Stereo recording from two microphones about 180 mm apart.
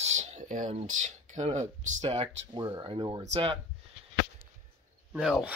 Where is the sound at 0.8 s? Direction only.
40° right (ahead or behind).